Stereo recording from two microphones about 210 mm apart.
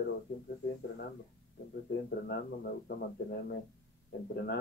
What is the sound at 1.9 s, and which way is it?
Speech, 50° left (ahead or behind).